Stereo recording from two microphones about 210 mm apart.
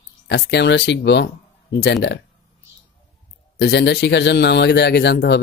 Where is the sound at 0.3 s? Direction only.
55° left (ahead or behind).